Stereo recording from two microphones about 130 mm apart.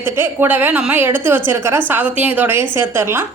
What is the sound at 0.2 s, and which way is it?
A woman's voice, 15° right (ahead or behind).